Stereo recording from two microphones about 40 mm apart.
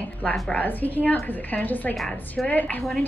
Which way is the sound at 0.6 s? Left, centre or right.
Left.